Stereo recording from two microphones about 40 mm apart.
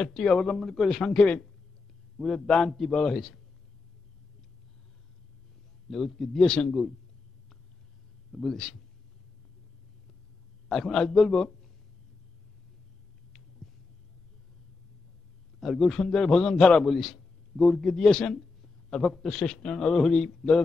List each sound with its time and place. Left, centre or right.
0.0 s a man's voice: centre
1.1 s speech: left
2.4 s a man's voice: centre
5.9 s a man's voice: centre
8.3 s a man's voice: centre
10.7 s a man's voice: centre
15.6 s a man's voice: centre; by 16.8 s left
16.8 s a man's voice: centre
18.3 s a sound: centre
18.9 s a man's voice: centre